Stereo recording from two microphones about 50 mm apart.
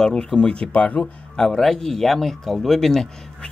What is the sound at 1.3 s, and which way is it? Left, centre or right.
Speech, centre.